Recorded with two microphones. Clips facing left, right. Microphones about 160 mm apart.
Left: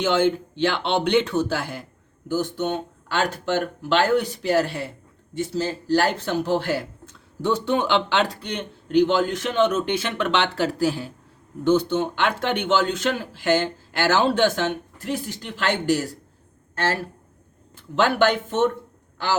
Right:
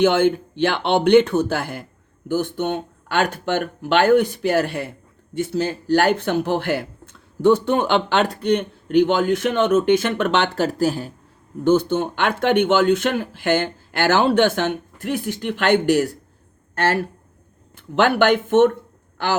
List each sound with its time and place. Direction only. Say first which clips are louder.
0.0 s speech: right 4 dB; 55° right (ahead or behind)